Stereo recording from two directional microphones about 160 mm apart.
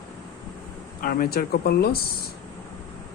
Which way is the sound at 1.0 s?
65° left (ahead or behind).